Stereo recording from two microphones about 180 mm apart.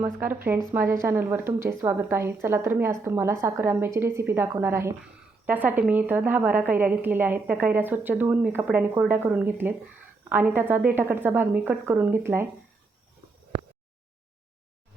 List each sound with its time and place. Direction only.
0.7 s a woman's voice: 15° right (ahead or behind)